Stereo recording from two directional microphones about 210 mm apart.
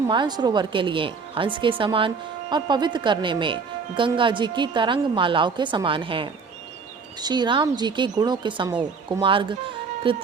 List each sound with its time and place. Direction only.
0.1 s speech: 20° right (ahead or behind)